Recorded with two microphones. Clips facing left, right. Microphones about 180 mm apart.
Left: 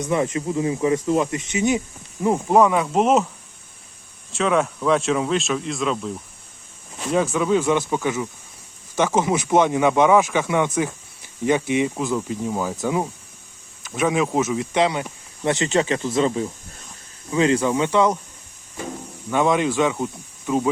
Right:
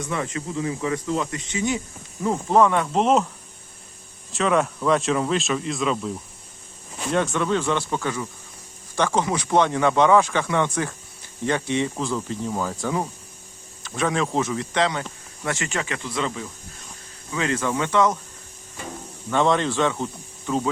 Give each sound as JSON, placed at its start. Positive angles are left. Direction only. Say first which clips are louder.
{"t": 0.0, "sound": "speech", "louder": "left 6 dB", "side_deg": 20}
{"t": 4.3, "sound": "speech", "louder": "left 1 dB", "side_deg": 0}
{"t": 14.1, "sound": "speech", "louder": "left 3 dB", "side_deg": 10}
{"t": 15.4, "sound": "speech", "louder": "left 7 dB", "side_deg": 25}
{"t": 17.3, "sound": "speech", "louder": "left 6 dB", "side_deg": 20}
{"t": 19.3, "sound": "speech", "louder": "left 1 dB", "side_deg": 10}